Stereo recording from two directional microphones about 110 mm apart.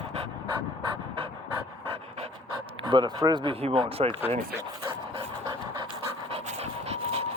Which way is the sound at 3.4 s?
55° right (ahead or behind).